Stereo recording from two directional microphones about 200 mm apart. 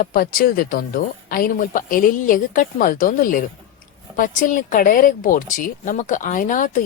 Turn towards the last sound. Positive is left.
turn(degrees=40)  # may be behind; listen again after turning